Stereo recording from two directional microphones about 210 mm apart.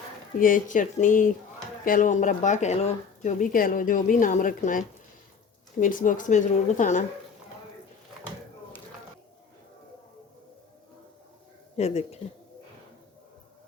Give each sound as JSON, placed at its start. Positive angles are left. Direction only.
{"t": 0.3, "sound": "speech", "side_deg": 40}
{"t": 11.8, "sound": "speech", "side_deg": 30}